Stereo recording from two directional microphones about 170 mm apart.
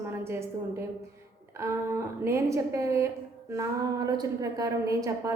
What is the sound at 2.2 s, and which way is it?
A woman's voice, 15° right (ahead or behind).